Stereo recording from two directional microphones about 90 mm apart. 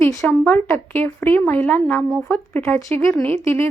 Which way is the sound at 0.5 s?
20° left (ahead or behind).